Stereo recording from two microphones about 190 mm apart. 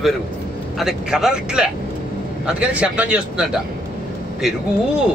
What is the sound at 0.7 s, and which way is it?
Speech, centre (ahead or behind).